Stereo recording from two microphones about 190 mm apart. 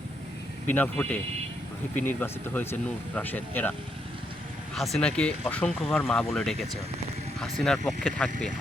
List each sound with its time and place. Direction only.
0.7 s speech: 10° left (ahead or behind)